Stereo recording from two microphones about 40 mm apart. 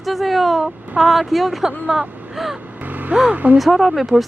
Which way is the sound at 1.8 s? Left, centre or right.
Centre.